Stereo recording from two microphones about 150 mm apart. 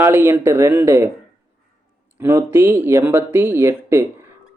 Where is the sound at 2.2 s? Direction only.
15° right (ahead or behind).